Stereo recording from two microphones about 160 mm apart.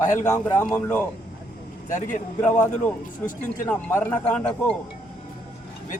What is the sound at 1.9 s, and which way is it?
Speech, 50° left (ahead or behind).